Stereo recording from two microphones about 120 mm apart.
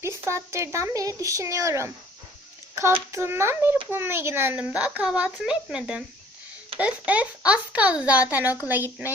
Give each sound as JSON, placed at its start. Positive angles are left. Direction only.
{"t": 0.0, "sound": "speech", "side_deg": -20}
{"t": 3.1, "sound": "speech", "side_deg": -20}